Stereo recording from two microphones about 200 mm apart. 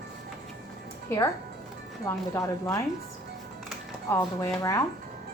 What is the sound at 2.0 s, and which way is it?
Speech, 15° left (ahead or behind).